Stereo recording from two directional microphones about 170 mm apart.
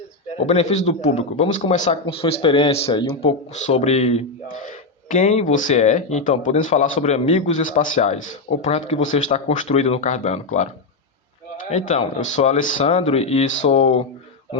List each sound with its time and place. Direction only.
0.3 s a man's voice: 40° left (ahead or behind)
11.7 s speech: 40° left (ahead or behind)
12.9 s a man's voice: 35° left (ahead or behind)